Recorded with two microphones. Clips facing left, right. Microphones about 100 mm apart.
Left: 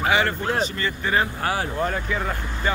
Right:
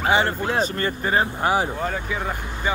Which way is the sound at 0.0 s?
30° right (ahead or behind).